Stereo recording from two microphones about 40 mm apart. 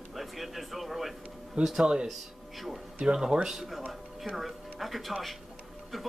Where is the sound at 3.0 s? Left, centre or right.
Right.